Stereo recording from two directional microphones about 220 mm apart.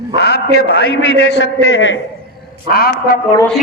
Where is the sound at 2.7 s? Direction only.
45° left (ahead or behind).